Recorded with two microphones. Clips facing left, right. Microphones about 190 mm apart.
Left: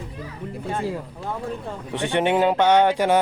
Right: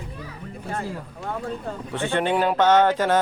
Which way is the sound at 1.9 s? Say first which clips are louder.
Left 2 dB; 15° left (ahead or behind).